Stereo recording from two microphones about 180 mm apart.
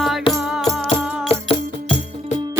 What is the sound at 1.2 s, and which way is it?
Music, 30° left (ahead or behind).